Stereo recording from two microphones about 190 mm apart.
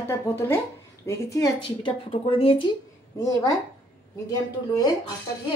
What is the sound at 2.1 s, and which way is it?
Speech, 30° left (ahead or behind).